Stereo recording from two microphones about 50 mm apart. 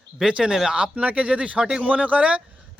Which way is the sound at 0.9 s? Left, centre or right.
Right.